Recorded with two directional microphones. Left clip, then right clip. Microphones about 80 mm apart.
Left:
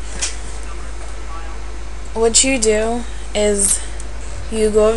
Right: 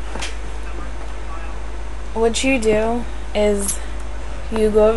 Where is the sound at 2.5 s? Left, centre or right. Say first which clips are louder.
Left 1 dB; centre.